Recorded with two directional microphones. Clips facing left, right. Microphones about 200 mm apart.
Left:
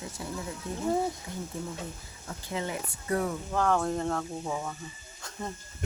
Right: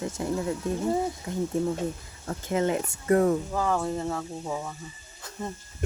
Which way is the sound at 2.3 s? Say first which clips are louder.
Right 8 dB; 50° right (ahead or behind).